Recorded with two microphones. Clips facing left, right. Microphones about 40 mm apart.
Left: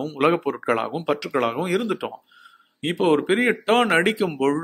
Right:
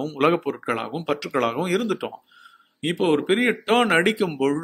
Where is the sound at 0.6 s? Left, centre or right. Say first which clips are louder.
Left 4 dB; left.